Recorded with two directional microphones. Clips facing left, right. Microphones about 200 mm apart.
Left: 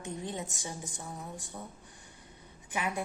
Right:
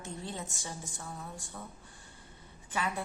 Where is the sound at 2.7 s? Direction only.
15° left (ahead or behind).